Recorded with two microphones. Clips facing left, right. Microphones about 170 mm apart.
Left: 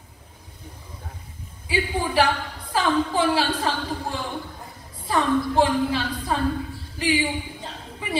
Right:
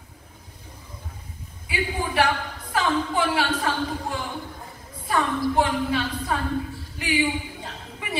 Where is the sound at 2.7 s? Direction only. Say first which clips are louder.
Left 2 dB; 30° left (ahead or behind).